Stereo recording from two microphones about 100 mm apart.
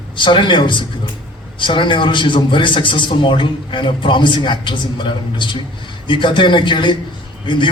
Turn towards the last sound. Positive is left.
turn(degrees=55)  # may be behind; listen again after turning